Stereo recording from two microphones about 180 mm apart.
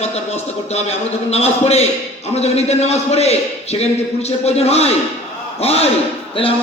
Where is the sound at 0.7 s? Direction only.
35° left (ahead or behind).